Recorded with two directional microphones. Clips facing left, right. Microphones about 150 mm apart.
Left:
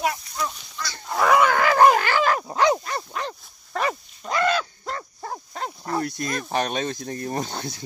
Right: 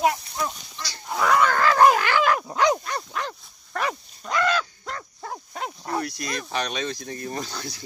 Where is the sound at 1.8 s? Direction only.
50° left (ahead or behind).